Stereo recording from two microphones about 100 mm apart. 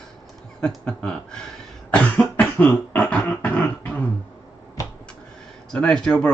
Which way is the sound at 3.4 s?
15° left (ahead or behind).